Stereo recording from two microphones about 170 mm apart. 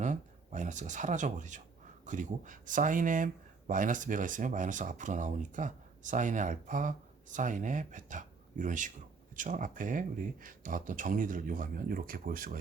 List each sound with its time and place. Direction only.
0.0 s speech: 45° right (ahead or behind)